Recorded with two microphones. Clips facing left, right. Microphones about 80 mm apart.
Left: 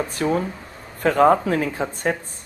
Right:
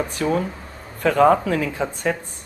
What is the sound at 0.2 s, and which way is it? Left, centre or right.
Speech, left.